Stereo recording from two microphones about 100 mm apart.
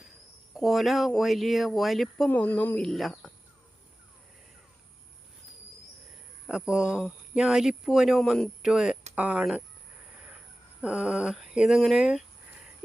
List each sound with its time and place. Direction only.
0.5 s speech: centre (ahead or behind)
2.3 s speech: 15° left (ahead or behind)
2.7 s speech: 5° left (ahead or behind)
6.5 s speech: 10° right (ahead or behind)
8.2 s speech: 5° left (ahead or behind)
8.6 s speech: 5° right (ahead or behind)